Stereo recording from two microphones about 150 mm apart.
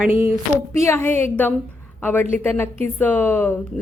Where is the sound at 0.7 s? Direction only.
20° left (ahead or behind).